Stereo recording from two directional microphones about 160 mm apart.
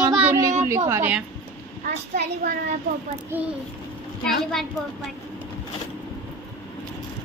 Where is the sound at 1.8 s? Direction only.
60° right (ahead or behind).